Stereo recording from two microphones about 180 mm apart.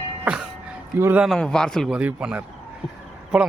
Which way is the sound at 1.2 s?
Centre (ahead or behind).